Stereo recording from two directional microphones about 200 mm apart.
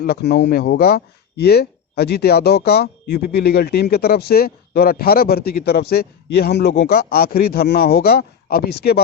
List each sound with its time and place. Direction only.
0.0 s speech: 55° left (ahead or behind)